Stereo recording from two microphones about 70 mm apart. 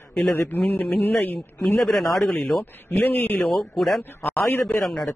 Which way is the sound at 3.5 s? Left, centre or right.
Centre.